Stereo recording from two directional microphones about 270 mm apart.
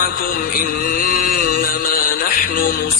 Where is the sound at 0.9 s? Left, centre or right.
Left.